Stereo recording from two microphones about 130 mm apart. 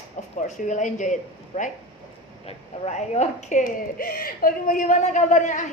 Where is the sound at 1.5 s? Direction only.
55° left (ahead or behind).